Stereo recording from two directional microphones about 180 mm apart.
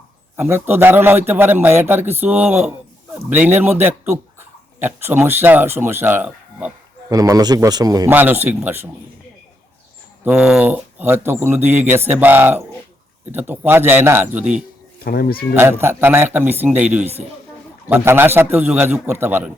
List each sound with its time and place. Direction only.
0.3 s a man's voice: 10° right (ahead or behind)
10.2 s speech: 5° right (ahead or behind)
14.9 s speech: 55° left (ahead or behind)
15.5 s speech: 15° right (ahead or behind)